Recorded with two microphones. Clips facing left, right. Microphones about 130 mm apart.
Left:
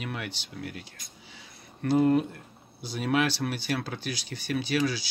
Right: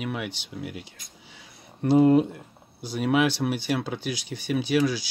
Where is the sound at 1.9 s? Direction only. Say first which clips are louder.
Right 5 dB; 15° right (ahead or behind).